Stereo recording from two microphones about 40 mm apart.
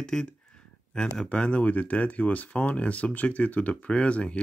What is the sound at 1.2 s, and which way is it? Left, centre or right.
Speech, left.